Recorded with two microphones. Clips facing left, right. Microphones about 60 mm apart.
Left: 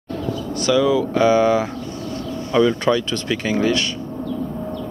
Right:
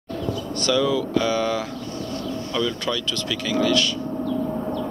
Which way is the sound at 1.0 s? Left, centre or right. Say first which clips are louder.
Left 7 dB; left.